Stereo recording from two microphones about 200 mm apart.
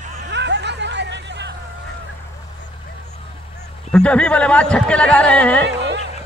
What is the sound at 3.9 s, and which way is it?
Speech, 5° left (ahead or behind).